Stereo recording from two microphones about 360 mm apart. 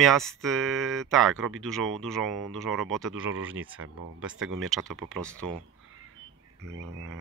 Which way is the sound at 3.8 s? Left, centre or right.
Right.